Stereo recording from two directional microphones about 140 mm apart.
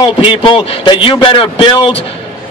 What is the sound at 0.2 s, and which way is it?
A man's voice, 35° left (ahead or behind).